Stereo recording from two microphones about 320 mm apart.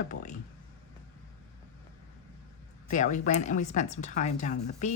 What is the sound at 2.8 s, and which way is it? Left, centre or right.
A woman's voice, left.